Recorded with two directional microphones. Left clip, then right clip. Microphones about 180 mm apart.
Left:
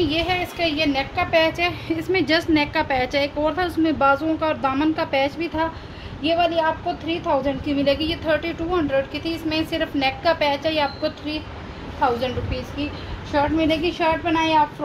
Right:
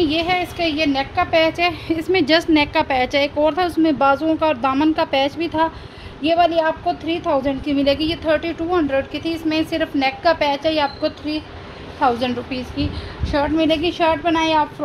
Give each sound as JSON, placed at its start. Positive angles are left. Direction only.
{"t": 0.0, "sound": "a woman's voice", "side_deg": -40}
{"t": 13.3, "sound": "a woman's voice", "side_deg": -50}